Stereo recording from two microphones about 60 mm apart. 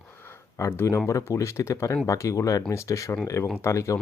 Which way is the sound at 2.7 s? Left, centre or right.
Left.